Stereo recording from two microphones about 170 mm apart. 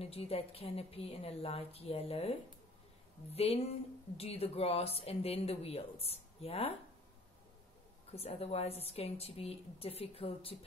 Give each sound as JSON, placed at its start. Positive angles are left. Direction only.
{"t": 0.0, "sound": "speech", "side_deg": 35}
{"t": 3.3, "sound": "speech", "side_deg": 35}
{"t": 8.1, "sound": "speech", "side_deg": 35}